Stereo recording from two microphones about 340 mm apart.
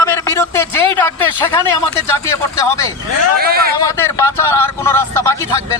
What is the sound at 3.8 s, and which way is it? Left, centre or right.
Speech, centre.